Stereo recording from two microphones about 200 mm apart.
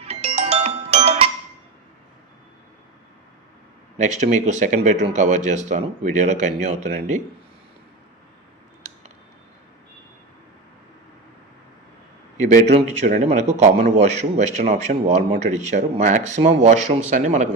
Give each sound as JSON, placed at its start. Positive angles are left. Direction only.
{"t": 0.0, "sound": "music", "side_deg": -30}
{"t": 3.9, "sound": "a man's voice", "side_deg": -35}
{"t": 13.1, "sound": "a man's voice", "side_deg": -35}